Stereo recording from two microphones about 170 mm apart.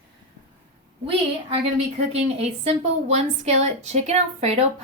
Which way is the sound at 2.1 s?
35° right (ahead or behind).